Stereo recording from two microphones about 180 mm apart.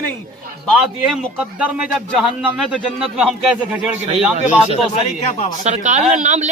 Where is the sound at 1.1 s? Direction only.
5° right (ahead or behind).